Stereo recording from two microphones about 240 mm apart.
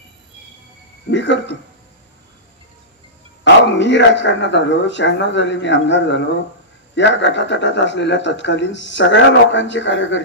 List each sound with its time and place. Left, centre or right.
1.1 s speech: left
3.8 s speech: left